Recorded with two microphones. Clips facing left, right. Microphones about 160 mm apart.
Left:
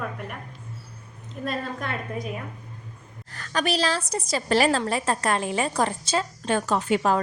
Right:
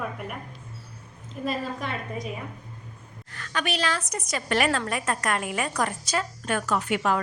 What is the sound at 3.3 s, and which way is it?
A woman's voice, 35° left (ahead or behind).